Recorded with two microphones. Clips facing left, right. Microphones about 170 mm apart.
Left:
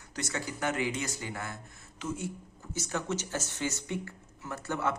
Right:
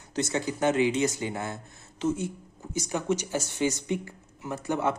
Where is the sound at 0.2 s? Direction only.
20° right (ahead or behind).